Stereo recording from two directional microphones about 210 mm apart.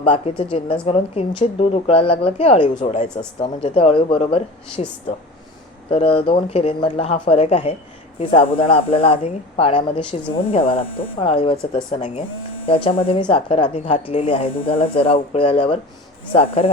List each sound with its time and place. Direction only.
0.0 s speech: 25° left (ahead or behind)
5.9 s speech: 25° left (ahead or behind)